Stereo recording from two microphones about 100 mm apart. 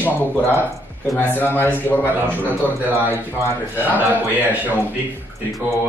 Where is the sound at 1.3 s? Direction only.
20° left (ahead or behind).